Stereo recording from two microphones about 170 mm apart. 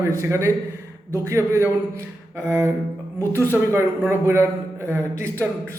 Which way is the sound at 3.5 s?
15° right (ahead or behind).